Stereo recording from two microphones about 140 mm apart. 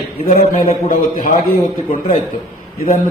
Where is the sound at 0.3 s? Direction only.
90° left.